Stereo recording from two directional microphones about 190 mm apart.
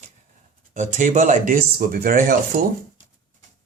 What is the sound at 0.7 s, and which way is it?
Speech, 40° right (ahead or behind).